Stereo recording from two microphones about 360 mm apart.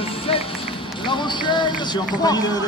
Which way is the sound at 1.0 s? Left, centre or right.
Centre.